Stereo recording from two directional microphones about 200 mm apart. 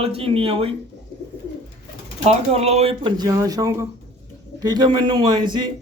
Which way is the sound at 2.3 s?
30° right (ahead or behind).